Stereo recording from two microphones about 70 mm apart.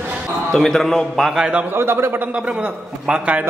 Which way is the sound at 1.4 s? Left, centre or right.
Centre.